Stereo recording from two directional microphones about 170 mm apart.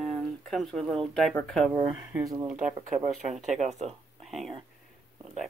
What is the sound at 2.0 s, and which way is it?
Speech, 20° right (ahead or behind).